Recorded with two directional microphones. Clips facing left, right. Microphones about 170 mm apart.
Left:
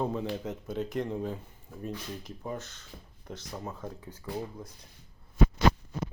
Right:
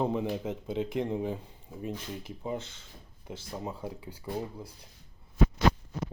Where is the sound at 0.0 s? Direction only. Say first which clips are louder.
Right 2 dB; 15° right (ahead or behind).